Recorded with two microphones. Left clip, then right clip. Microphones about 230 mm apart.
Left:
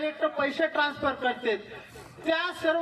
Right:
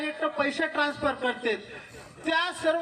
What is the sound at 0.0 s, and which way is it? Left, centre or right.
A man's voice, right.